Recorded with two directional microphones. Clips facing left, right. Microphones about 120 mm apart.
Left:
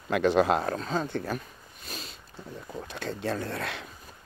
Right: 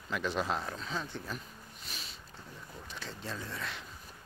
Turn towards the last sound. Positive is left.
turn(degrees=65)  # may be behind; listen again after turning